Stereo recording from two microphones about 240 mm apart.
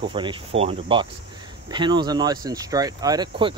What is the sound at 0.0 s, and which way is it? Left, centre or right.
Speech, right.